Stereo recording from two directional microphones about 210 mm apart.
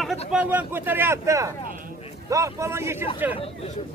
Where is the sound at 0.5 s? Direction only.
10° right (ahead or behind).